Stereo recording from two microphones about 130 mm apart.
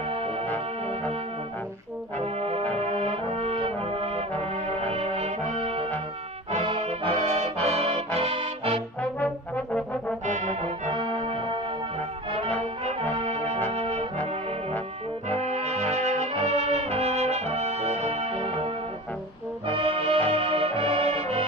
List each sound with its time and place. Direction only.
0.1 s music: 50° right (ahead or behind)
2.1 s brass instrument: 50° right (ahead or behind)
8.2 s music: 45° right (ahead or behind)
9.0 s trombone: 10° left (ahead or behind)
10.2 s brass instrument: 65° right (ahead or behind)
10.9 s music: 40° right (ahead or behind)
12.3 s brass instrument: 50° right (ahead or behind)
15.4 s brass instrument: 55° right (ahead or behind)
19.6 s music: 45° right (ahead or behind)